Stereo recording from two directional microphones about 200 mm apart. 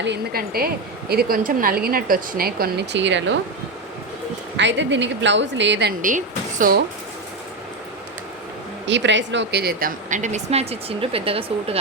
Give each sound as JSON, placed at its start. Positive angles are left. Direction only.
{"t": 0.0, "sound": "a woman's voice", "side_deg": -55}
{"t": 4.5, "sound": "a woman's voice", "side_deg": -65}
{"t": 6.0, "sound": "speech", "side_deg": -40}
{"t": 8.9, "sound": "a woman's voice", "side_deg": -65}